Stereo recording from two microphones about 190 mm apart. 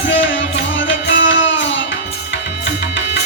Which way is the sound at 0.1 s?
75° left (ahead or behind).